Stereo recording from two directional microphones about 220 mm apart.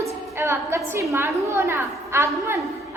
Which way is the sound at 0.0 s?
10° right (ahead or behind).